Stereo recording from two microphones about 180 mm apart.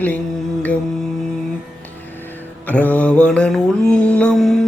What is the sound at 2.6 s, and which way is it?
Mantra, 10° left (ahead or behind).